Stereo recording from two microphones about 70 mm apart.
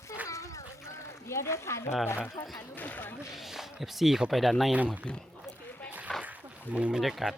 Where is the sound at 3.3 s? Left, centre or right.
Centre.